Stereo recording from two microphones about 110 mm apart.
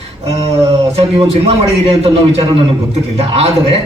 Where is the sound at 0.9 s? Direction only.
65° right (ahead or behind).